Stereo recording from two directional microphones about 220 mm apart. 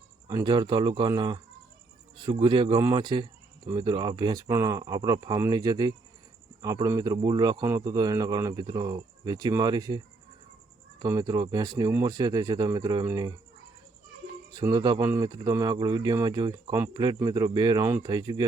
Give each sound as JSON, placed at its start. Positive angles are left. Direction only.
{"t": 0.3, "sound": "speech", "side_deg": -20}
{"t": 11.0, "sound": "speech", "side_deg": -15}
{"t": 14.5, "sound": "speech", "side_deg": -20}